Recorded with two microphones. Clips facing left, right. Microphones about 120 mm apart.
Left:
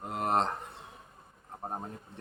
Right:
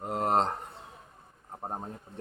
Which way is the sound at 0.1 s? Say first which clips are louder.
Right 2 dB; 30° right (ahead or behind).